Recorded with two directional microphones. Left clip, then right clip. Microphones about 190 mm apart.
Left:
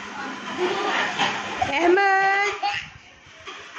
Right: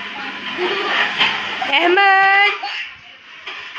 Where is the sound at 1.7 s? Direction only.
Centre (ahead or behind).